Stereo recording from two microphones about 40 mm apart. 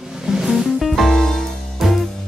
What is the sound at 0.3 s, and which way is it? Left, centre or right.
Music, centre.